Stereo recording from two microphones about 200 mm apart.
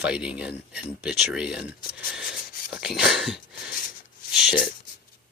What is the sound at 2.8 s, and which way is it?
Speech, centre (ahead or behind).